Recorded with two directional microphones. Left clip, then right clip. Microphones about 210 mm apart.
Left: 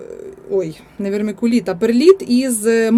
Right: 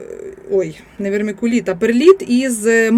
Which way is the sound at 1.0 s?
15° left (ahead or behind).